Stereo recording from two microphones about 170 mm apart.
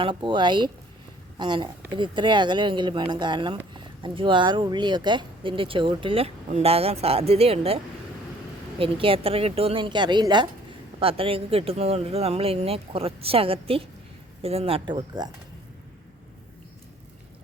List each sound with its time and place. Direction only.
0.0 s speech: 30° right (ahead or behind)
8.8 s speech: 30° right (ahead or behind)